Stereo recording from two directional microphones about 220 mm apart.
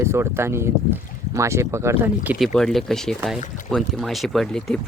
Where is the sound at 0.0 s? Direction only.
10° right (ahead or behind).